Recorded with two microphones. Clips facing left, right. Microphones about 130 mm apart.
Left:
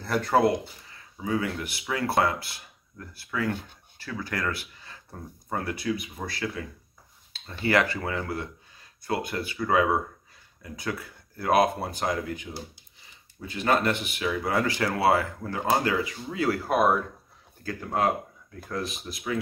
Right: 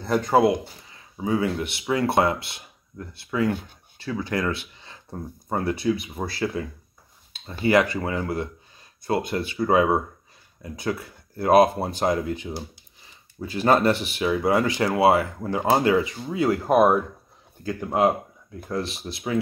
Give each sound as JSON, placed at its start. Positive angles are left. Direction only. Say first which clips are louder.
{"t": 0.0, "sound": "speech", "louder": "right 3 dB", "side_deg": -15}
{"t": 1.2, "sound": "speech", "louder": "right 5 dB", "side_deg": -25}
{"t": 7.3, "sound": "speech", "louder": "right 4 dB", "side_deg": -15}